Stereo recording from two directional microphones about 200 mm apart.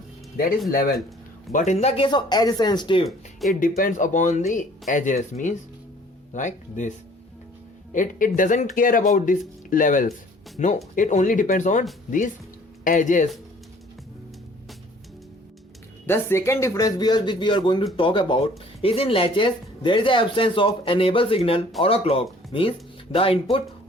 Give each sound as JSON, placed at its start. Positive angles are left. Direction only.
{"t": 0.3, "sound": "speech", "side_deg": 45}
{"t": 1.5, "sound": "speech", "side_deg": 35}
{"t": 3.5, "sound": "speech", "side_deg": 45}
{"t": 7.9, "sound": "speech", "side_deg": 40}
{"t": 16.0, "sound": "speech", "side_deg": 10}